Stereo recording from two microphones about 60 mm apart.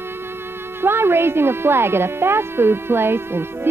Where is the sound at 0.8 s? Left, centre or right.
Right.